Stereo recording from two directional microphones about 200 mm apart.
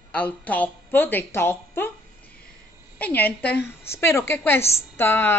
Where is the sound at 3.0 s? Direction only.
10° left (ahead or behind).